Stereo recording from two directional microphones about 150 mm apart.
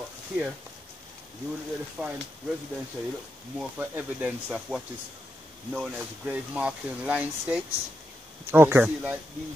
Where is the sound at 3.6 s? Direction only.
10° right (ahead or behind).